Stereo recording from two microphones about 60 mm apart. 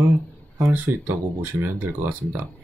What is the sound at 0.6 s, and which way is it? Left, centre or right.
Speech, right.